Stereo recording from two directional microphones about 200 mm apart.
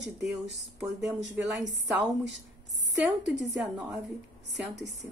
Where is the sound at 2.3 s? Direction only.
65° right (ahead or behind).